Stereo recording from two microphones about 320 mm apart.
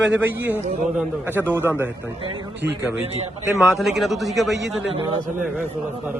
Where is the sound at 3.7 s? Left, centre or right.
Centre.